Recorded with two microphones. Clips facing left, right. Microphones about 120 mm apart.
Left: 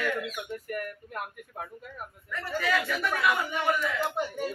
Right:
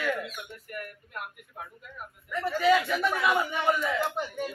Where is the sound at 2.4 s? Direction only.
20° right (ahead or behind).